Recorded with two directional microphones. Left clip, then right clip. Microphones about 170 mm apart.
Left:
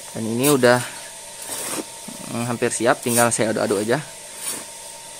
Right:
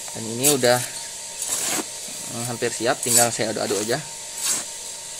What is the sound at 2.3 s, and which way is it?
Speech, 50° left (ahead or behind).